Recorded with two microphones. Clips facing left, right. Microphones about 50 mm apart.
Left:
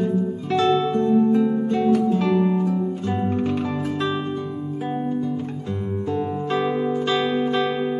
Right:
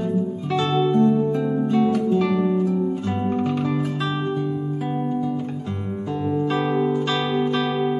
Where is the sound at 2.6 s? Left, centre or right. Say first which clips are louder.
Right 1 dB; centre.